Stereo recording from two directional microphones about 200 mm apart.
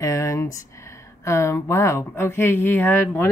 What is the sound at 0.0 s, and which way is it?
Speech, 15° left (ahead or behind).